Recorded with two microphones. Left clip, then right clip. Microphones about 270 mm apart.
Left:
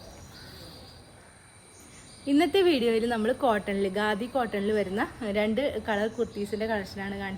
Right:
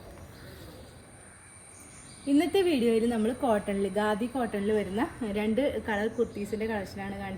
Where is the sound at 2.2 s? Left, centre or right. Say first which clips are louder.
Left 2 dB; left.